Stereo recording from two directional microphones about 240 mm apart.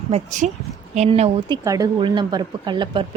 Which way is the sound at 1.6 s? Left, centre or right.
Centre.